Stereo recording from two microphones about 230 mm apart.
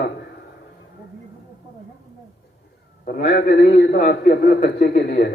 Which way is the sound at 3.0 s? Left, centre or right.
Left.